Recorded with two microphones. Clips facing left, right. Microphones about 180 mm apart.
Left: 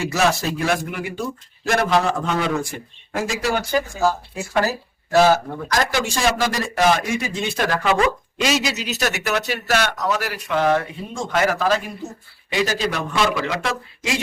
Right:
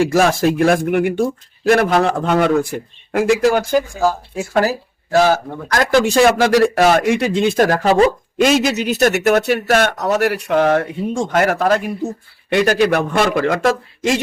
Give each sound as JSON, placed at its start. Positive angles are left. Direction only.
{"t": 0.0, "sound": "a man's voice", "side_deg": -50}
{"t": 5.1, "sound": "a man's voice", "side_deg": -40}
{"t": 5.7, "sound": "a man's voice", "side_deg": -55}
{"t": 8.4, "sound": "a man's voice", "side_deg": -50}
{"t": 10.5, "sound": "a man's voice", "side_deg": -55}